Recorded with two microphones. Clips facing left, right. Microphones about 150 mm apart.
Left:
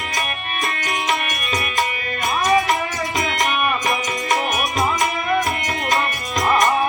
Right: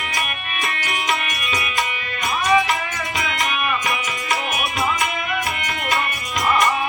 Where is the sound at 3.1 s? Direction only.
40° left (ahead or behind).